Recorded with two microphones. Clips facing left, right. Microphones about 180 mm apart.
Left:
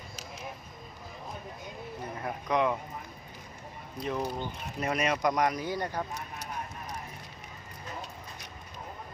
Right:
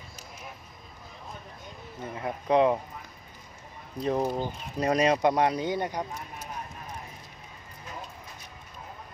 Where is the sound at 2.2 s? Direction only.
30° right (ahead or behind).